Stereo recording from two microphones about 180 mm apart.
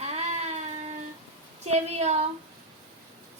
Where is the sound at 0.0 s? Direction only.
35° right (ahead or behind).